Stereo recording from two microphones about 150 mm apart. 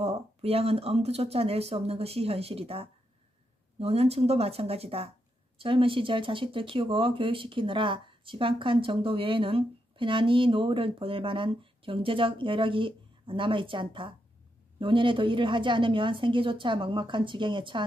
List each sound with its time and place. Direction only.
0.0 s speech: 45° right (ahead or behind)